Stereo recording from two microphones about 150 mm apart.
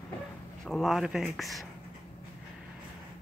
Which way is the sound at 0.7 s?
Centre (ahead or behind).